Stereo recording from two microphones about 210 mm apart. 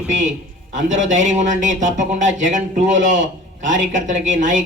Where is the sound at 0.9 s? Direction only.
35° right (ahead or behind).